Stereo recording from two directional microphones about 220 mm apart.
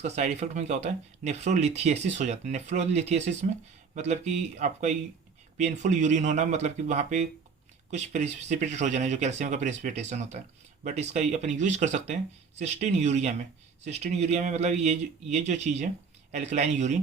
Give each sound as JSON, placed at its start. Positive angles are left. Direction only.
{"t": 0.0, "sound": "speech", "side_deg": -30}